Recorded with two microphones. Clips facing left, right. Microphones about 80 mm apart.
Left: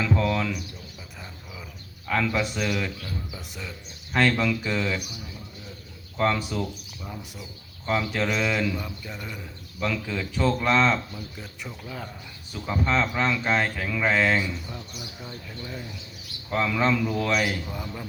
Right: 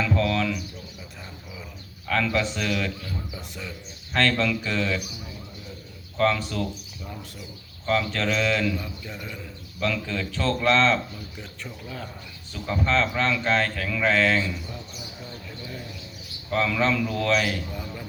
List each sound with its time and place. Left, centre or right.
0.0 s bird: centre
2.0 s speech: centre
4.1 s speech: centre
6.1 s speech: centre
9.8 s speech: centre
16.5 s speech: centre